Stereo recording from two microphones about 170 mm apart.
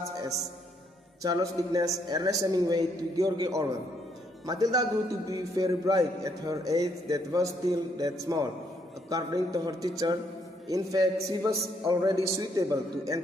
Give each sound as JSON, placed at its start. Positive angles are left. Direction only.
{"t": 1.2, "sound": "a man's voice", "side_deg": -20}